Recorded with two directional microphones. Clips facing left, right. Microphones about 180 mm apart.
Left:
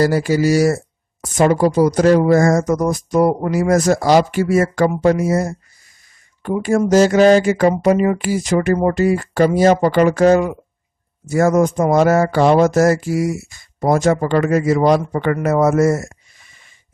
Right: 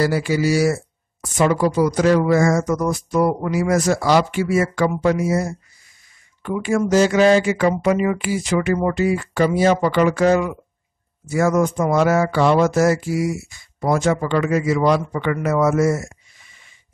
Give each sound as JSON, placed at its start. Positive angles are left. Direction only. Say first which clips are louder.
{"t": 0.0, "sound": "mantra", "louder": "left 4 dB", "side_deg": 40}
{"t": 2.8, "sound": "speech", "louder": "left 3 dB", "side_deg": 40}
{"t": 6.4, "sound": "mantra", "louder": "left 3 dB", "side_deg": 40}
{"t": 11.2, "sound": "speech", "louder": "left 3 dB", "side_deg": 45}